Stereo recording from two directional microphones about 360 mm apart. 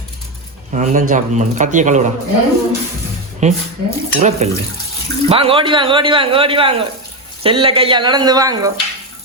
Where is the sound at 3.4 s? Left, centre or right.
Centre.